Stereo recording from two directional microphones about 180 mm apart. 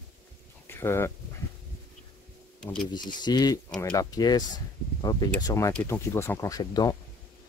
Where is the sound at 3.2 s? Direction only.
20° left (ahead or behind).